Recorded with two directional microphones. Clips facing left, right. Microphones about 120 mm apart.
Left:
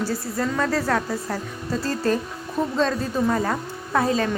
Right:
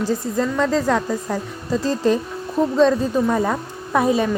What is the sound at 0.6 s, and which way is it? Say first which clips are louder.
Speech: right 4 dB; 15° right (ahead or behind).